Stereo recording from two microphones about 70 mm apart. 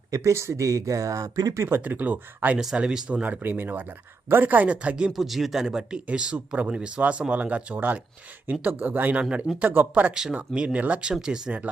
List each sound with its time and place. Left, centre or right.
0.1 s speech: right
1.6 s speech: right
3.4 s speech: right
10.2 s speech: centre